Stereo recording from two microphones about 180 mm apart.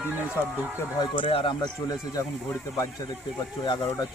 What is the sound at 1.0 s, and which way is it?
Speech, 30° left (ahead or behind).